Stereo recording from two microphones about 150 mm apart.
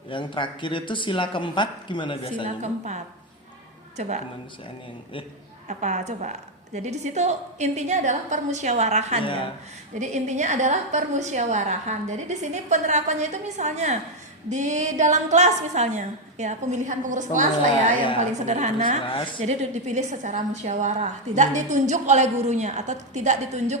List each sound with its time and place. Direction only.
0.1 s speech: 35° left (ahead or behind)
2.6 s a woman's voice: 50° right (ahead or behind)
5.6 s a woman's voice: 50° right (ahead or behind)
9.2 s speech: 35° left (ahead or behind)
9.9 s a woman's voice: 50° right (ahead or behind)
19.0 s speech: 35° left (ahead or behind)
19.4 s a woman's voice: 50° right (ahead or behind)